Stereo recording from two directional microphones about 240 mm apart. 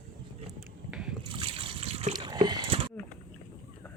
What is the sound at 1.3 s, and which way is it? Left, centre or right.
Water, right.